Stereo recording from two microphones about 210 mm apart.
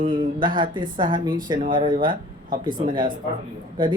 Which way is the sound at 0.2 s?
20° right (ahead or behind).